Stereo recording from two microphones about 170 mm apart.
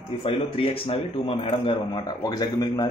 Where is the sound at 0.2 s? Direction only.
35° left (ahead or behind).